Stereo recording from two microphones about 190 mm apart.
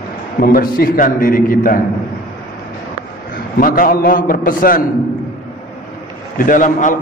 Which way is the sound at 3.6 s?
50° left (ahead or behind).